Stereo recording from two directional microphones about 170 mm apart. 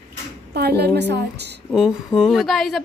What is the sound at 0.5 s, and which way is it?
A woman's voice, 70° right (ahead or behind).